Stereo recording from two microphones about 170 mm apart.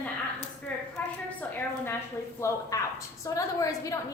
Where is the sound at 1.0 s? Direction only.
10° left (ahead or behind).